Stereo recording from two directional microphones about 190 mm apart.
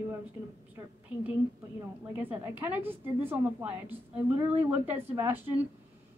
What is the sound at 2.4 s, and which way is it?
A woman's voice, 10° right (ahead or behind).